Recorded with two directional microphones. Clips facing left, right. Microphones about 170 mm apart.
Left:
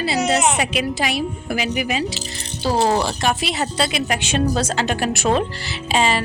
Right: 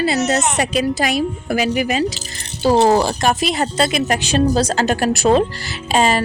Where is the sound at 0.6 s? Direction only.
40° right (ahead or behind).